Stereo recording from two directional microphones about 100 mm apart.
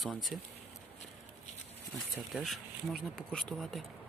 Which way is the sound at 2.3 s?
Centre (ahead or behind).